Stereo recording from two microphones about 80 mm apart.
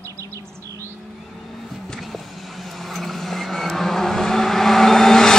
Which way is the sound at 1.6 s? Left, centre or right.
Centre.